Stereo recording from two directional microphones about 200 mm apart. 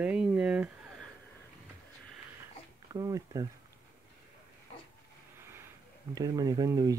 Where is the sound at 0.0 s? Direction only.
5° right (ahead or behind).